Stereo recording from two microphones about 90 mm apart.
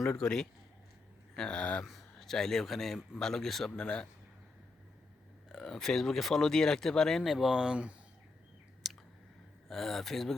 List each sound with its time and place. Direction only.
0.0 s speech: 10° left (ahead or behind)
1.8 s speech: centre (ahead or behind)
5.5 s speech: 5° left (ahead or behind)
8.8 s clicking: 5° right (ahead or behind)
9.6 s speech: 5° left (ahead or behind)